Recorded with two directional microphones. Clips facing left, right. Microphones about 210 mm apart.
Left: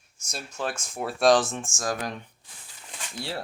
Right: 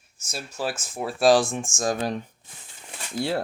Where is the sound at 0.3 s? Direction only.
5° right (ahead or behind); by 2.1 s 25° right (ahead or behind).